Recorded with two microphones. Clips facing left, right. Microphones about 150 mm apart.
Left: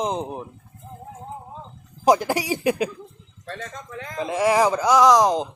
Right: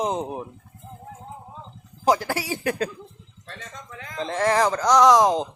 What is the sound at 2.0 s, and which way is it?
Speech, 15° left (ahead or behind).